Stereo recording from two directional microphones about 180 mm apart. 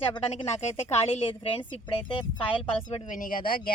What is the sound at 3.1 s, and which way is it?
Speech, 50° left (ahead or behind).